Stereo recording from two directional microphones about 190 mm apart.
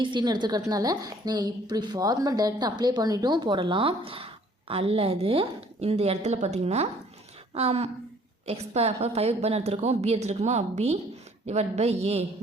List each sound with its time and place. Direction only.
0.0 s a woman's voice: 25° right (ahead or behind)